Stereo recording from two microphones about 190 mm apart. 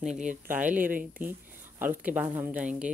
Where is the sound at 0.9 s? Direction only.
45° right (ahead or behind).